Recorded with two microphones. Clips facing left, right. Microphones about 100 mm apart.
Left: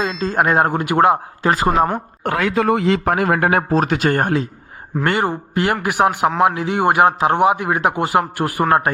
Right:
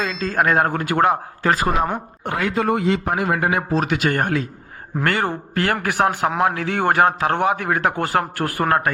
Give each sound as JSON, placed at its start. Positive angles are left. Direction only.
{"t": 0.0, "sound": "speech", "side_deg": 25}
{"t": 2.2, "sound": "speech", "side_deg": 90}
{"t": 5.0, "sound": "a man's voice", "side_deg": 20}